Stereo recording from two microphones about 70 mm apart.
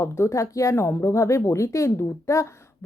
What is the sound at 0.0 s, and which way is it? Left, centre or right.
Speech, left.